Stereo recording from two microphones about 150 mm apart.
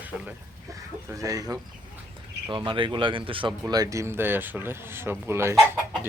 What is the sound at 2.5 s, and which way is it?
Speech, 35° right (ahead or behind).